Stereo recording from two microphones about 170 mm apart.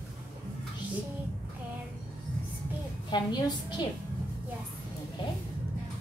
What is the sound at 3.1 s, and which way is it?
Speech, 25° left (ahead or behind).